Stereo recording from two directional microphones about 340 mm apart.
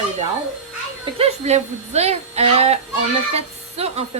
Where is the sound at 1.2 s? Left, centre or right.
Centre.